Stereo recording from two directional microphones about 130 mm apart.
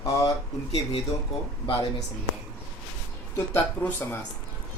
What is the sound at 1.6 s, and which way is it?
Speech, 30° left (ahead or behind).